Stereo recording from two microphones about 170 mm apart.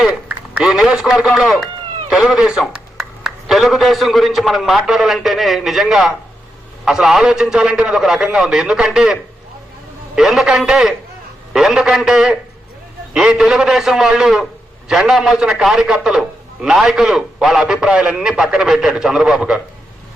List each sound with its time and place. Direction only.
0.0 s a man's voice: 5° right (ahead or behind)
10.2 s a man's voice: 5° right (ahead or behind)